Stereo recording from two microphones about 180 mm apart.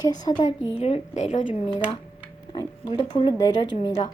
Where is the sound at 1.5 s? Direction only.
30° left (ahead or behind).